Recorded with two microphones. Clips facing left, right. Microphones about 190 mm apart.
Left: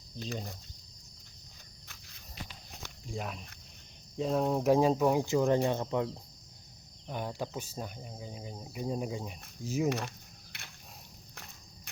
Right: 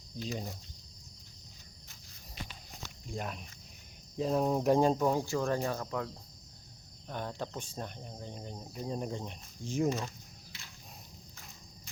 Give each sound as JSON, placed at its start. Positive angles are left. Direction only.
{"t": 0.3, "sound": "speech", "side_deg": -5}
{"t": 3.1, "sound": "speech", "side_deg": 0}
{"t": 5.2, "sound": "speech", "side_deg": 20}
{"t": 7.1, "sound": "speech", "side_deg": 10}
{"t": 10.1, "sound": "a sound", "side_deg": 60}